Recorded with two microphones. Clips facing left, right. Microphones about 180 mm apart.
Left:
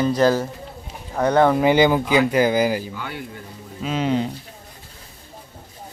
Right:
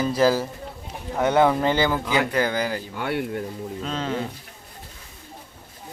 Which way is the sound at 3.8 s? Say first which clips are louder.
Left 7 dB; 15° left (ahead or behind).